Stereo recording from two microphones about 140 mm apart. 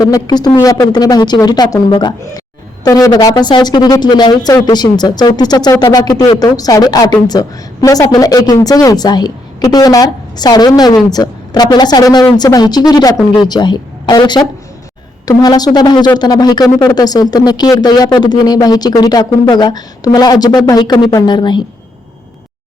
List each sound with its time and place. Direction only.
0.0 s speech: 25° left (ahead or behind)